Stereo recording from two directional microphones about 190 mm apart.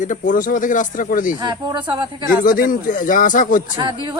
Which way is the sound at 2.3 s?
50° left (ahead or behind).